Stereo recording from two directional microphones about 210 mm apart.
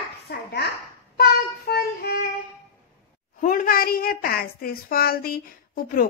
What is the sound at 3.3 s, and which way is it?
A woman's voice, 40° left (ahead or behind).